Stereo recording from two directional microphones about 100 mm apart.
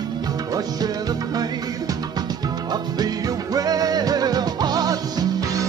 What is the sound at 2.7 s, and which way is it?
Music, 40° right (ahead or behind).